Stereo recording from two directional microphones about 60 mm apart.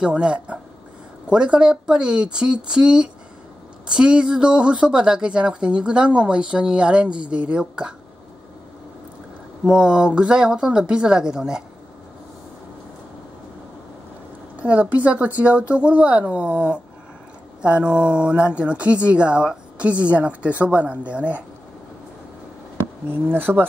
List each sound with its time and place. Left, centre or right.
0.0 s speech: centre
9.7 s speech: centre
14.6 s speech: right
23.0 s speech: right